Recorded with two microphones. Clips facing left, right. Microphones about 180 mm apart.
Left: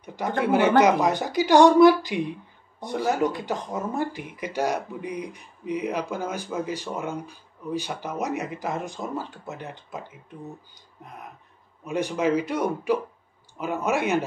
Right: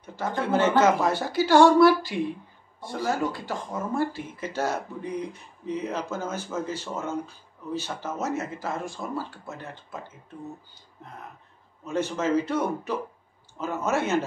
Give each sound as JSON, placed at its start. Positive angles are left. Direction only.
{"t": 0.0, "sound": "speech", "side_deg": 15}
{"t": 11.8, "sound": "speech", "side_deg": 15}